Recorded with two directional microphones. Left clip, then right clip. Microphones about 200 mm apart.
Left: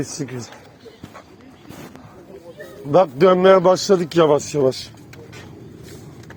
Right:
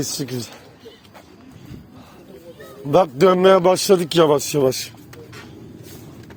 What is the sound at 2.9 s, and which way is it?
A man's voice, 50° right (ahead or behind).